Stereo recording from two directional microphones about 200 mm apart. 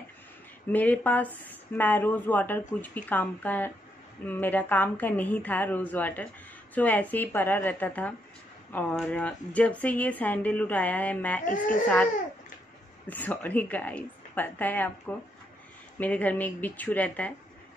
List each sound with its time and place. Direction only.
0.7 s speech: 10° left (ahead or behind)
11.4 s speech: 40° left (ahead or behind)
13.0 s speech: 10° left (ahead or behind)